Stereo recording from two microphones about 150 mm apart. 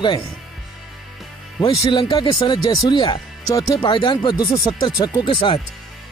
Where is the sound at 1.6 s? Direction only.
35° left (ahead or behind).